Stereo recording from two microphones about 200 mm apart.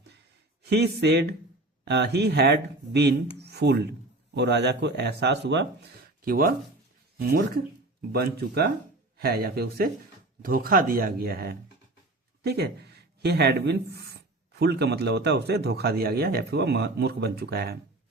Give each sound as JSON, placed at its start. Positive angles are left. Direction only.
{"t": 0.6, "sound": "speech", "side_deg": -55}
{"t": 6.2, "sound": "speech", "side_deg": -45}